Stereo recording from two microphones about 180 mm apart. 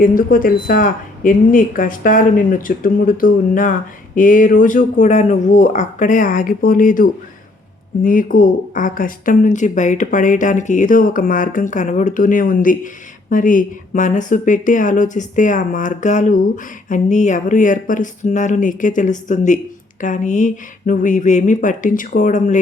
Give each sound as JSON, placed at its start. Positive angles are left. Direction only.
{"t": 0.0, "sound": "a woman's voice", "side_deg": 50}